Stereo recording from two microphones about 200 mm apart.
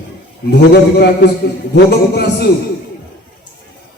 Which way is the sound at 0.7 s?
55° left (ahead or behind).